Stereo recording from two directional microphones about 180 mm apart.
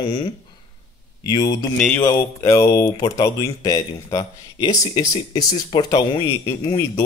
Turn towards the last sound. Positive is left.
turn(degrees=20)  # may be behind; listen again after turning